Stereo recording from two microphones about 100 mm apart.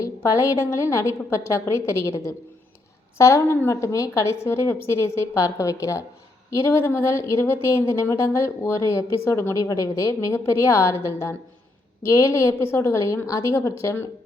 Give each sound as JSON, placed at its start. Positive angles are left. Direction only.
{"t": 0.0, "sound": "a woman's voice", "side_deg": 35}